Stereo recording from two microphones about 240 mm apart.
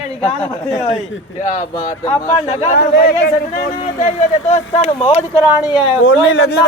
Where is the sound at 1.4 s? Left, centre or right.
Left.